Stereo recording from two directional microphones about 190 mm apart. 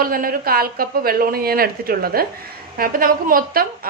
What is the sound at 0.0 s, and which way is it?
A woman's voice, 50° right (ahead or behind).